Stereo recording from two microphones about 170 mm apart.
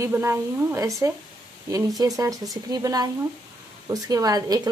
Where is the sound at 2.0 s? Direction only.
20° right (ahead or behind).